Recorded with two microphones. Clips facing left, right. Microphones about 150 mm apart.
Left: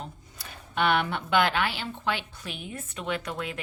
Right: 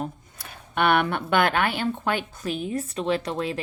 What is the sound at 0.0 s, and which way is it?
A woman's voice, 55° right (ahead or behind).